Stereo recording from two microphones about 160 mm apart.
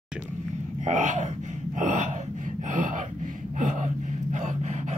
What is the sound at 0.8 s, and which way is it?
Speech, 50° right (ahead or behind).